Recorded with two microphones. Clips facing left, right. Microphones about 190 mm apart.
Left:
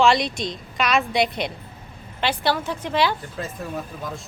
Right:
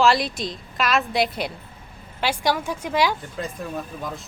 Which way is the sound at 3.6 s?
Centre (ahead or behind).